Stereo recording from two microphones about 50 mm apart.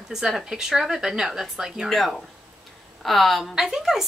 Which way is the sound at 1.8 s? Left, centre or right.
Centre.